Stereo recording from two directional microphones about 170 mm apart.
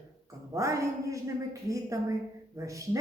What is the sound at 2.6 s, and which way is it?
Speech, 20° right (ahead or behind).